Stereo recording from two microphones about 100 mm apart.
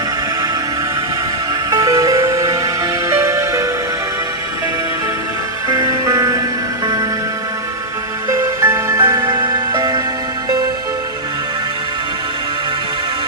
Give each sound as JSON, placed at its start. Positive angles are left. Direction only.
{"t": 1.7, "sound": "music", "side_deg": -35}
{"t": 5.6, "sound": "music", "side_deg": -40}
{"t": 8.4, "sound": "music", "side_deg": -25}
{"t": 9.1, "sound": "music", "side_deg": -50}